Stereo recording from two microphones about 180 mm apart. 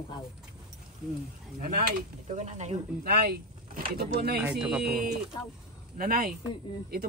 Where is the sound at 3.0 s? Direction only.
55° right (ahead or behind).